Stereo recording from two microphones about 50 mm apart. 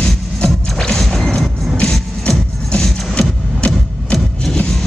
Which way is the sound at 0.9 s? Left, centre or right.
Centre.